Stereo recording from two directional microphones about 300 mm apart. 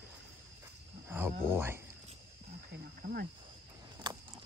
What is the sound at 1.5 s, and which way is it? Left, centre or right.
Speech, centre.